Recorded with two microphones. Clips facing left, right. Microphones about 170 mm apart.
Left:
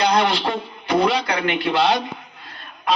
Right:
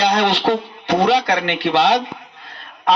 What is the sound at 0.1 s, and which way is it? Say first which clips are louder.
A man's voice: right 3 dB; 70° right (ahead or behind).